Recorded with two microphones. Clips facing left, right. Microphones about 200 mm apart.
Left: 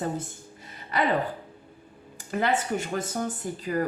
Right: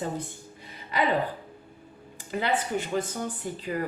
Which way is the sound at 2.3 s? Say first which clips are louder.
Left 2 dB; 45° left (ahead or behind).